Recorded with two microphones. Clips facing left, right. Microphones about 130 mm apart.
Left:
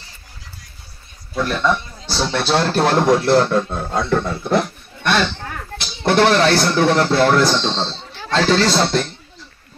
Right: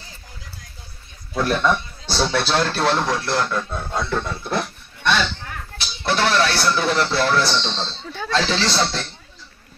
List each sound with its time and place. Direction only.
1.4 s a man's voice: 5° right (ahead or behind)
2.3 s speech: 20° left (ahead or behind)
2.6 s speech: 45° left (ahead or behind)
3.3 s speech: 30° left (ahead or behind); by 9.1 s 50° left (ahead or behind)